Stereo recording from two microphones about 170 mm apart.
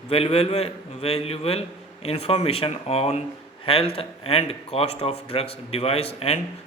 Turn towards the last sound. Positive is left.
turn(degrees=35)  # may be behind; listen again after turning